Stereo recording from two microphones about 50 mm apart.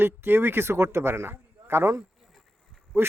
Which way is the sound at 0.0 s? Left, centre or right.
Right.